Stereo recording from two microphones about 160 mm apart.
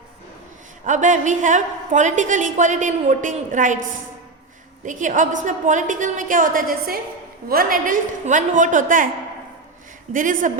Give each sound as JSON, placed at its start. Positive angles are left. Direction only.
{"t": 0.9, "sound": "a woman's voice", "side_deg": -50}
{"t": 4.9, "sound": "a woman's voice", "side_deg": -50}
{"t": 10.1, "sound": "a woman's voice", "side_deg": -55}